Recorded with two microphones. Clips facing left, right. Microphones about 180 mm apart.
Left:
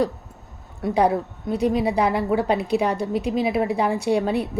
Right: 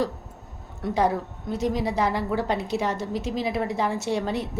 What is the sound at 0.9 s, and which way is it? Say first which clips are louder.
A woman's voice: left 4 dB; 15° left (ahead or behind).